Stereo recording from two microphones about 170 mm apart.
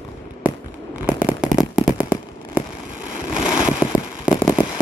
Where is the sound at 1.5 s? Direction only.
20° left (ahead or behind).